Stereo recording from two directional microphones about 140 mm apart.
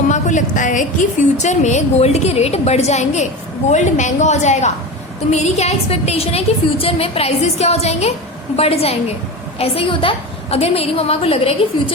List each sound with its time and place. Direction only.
0.1 s a woman's voice: 60° left (ahead or behind); by 11.9 s 45° left (ahead or behind)